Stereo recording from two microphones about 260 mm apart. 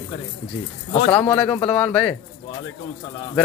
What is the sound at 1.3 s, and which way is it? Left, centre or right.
Speech, centre.